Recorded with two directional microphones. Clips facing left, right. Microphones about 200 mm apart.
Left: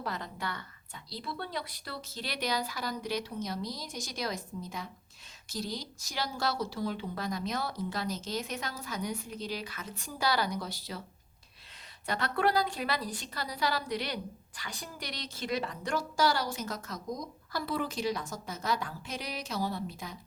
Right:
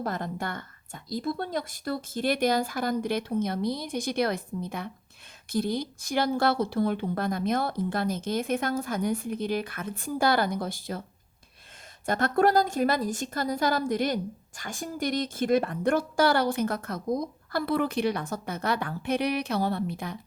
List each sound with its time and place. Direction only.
0.0 s speech: 50° right (ahead or behind)
12.0 s a woman's voice: 45° right (ahead or behind)